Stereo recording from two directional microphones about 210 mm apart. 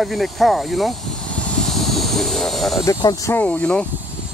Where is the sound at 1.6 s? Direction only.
Centre (ahead or behind).